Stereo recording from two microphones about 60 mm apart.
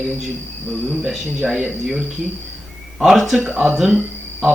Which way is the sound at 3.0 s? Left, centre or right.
Centre.